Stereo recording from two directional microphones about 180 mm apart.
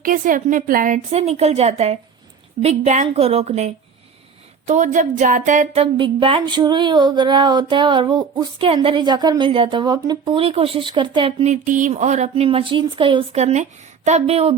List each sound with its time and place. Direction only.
0.0 s a woman's voice: 50° right (ahead or behind); by 14.5 s 35° right (ahead or behind)